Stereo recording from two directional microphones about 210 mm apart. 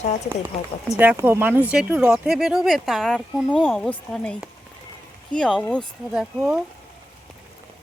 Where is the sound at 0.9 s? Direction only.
10° right (ahead or behind).